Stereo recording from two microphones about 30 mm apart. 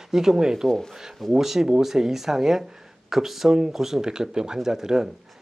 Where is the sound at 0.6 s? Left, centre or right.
Centre.